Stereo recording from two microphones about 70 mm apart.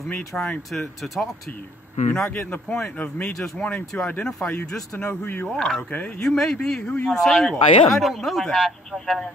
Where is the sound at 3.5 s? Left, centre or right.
Centre.